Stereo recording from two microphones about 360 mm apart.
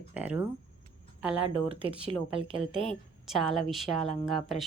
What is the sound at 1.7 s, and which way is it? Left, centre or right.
Speech, centre.